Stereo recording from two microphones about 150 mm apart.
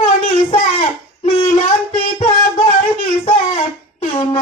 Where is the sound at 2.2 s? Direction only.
40° left (ahead or behind).